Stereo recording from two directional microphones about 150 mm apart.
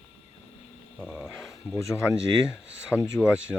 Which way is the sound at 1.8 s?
20° left (ahead or behind).